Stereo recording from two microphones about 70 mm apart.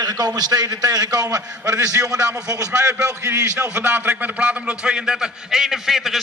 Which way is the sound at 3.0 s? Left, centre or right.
Right.